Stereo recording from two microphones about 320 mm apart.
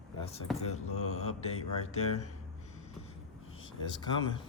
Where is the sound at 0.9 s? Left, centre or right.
Left.